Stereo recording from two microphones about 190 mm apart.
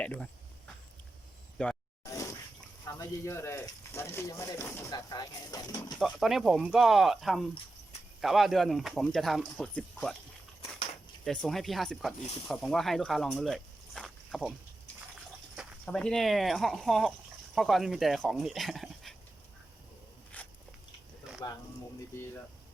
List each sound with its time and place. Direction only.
0.0 s speech: 5° left (ahead or behind)
1.6 s speech: 5° left (ahead or behind)
2.0 s a sound: 15° left (ahead or behind)
3.0 s speech: 15° left (ahead or behind)
6.0 s speech: centre (ahead or behind)
11.3 s speech: centre (ahead or behind)
15.5 s speech: 5° left (ahead or behind)
20.4 s biting: 10° left (ahead or behind)
21.3 s a sound: 5° right (ahead or behind)